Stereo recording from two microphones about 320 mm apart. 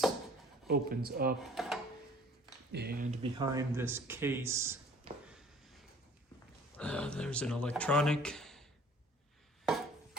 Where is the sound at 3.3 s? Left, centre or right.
Centre.